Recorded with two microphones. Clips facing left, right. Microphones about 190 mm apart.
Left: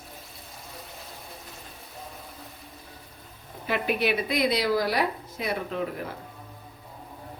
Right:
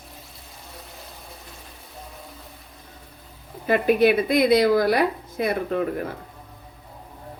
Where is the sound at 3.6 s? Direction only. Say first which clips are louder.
Right 8 dB; 45° right (ahead or behind).